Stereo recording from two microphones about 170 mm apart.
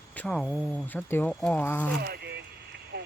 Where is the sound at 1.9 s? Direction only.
70° right (ahead or behind).